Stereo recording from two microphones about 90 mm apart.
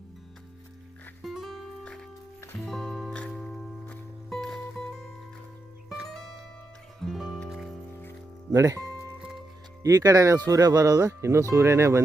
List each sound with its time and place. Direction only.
1.2 s music: centre (ahead or behind)
5.9 s zither: 5° right (ahead or behind)
7.0 s music: centre (ahead or behind)
8.5 s speech: 35° right (ahead or behind)
9.1 s music: 10° right (ahead or behind)
9.8 s speech: 40° right (ahead or behind)